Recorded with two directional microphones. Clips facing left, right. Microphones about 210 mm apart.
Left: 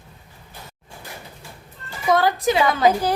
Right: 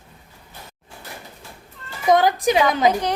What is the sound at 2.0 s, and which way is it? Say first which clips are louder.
Speech: right 2 dB; 20° right (ahead or behind).